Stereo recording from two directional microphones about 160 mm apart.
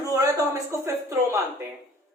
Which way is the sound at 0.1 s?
20° right (ahead or behind).